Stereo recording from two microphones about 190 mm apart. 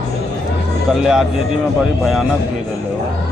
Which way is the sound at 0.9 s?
Centre (ahead or behind).